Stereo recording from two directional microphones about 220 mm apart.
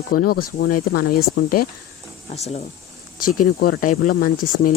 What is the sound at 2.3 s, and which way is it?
Speech, 30° left (ahead or behind).